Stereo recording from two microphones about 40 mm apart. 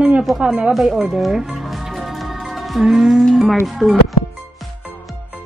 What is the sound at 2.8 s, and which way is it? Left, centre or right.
Speech, centre.